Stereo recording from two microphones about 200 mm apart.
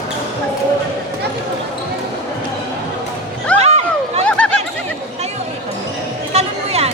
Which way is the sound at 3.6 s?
35° right (ahead or behind).